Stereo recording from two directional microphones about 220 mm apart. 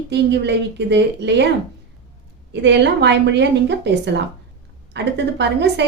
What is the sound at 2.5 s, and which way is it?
A woman's voice, 55° right (ahead or behind).